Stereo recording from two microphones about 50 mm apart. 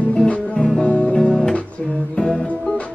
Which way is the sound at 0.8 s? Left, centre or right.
Left.